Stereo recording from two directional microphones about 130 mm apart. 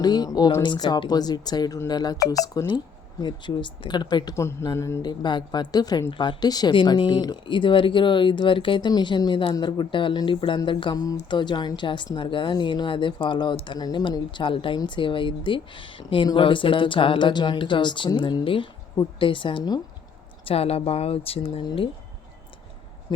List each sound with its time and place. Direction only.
0.0 s speech: 30° left (ahead or behind)
4.4 s speech: 20° left (ahead or behind)
5.2 s speech: 35° left (ahead or behind)
20.4 s speech: 50° left (ahead or behind)